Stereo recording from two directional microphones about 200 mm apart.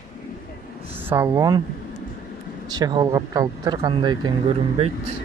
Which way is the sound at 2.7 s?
20° right (ahead or behind).